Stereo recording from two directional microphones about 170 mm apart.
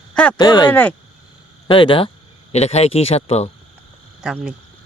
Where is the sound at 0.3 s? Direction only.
25° left (ahead or behind).